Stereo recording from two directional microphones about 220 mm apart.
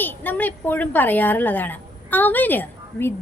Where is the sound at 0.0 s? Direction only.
10° left (ahead or behind).